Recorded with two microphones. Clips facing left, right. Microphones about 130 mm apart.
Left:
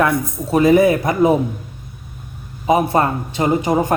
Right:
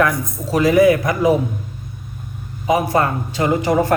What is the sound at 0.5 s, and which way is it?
Speech, 25° left (ahead or behind).